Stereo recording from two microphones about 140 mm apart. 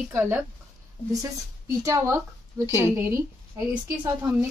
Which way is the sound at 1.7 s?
20° right (ahead or behind).